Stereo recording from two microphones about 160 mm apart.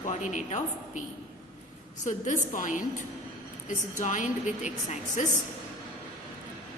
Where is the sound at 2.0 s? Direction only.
55° left (ahead or behind).